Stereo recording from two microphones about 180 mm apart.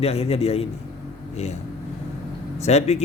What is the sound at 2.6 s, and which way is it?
Speech, 40° left (ahead or behind).